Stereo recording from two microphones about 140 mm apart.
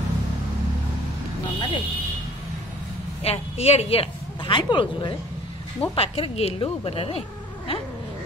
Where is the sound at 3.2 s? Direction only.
45° left (ahead or behind).